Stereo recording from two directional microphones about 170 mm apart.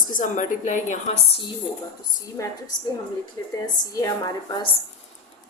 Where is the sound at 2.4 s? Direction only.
20° left (ahead or behind).